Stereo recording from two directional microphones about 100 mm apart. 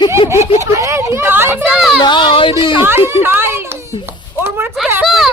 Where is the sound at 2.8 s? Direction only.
25° right (ahead or behind).